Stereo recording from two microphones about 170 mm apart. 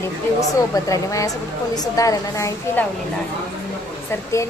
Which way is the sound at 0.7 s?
20° left (ahead or behind).